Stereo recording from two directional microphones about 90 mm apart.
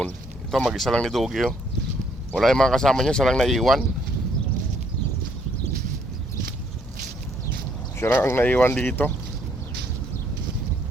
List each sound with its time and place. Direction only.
0.5 s speech: centre (ahead or behind)
7.9 s speech: 25° left (ahead or behind)